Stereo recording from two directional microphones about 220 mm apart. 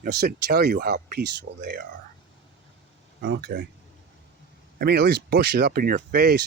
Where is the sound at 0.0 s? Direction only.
45° right (ahead or behind).